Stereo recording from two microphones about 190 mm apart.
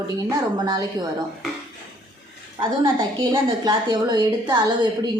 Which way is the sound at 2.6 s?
25° right (ahead or behind).